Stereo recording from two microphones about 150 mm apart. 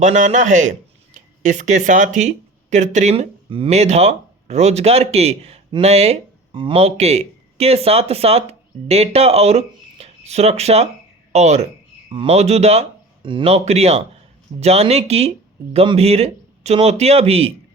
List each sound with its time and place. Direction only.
0.0 s a man's voice: 55° right (ahead or behind)
12.0 s a man's voice: 35° right (ahead or behind)
13.2 s a man's voice: 35° right (ahead or behind)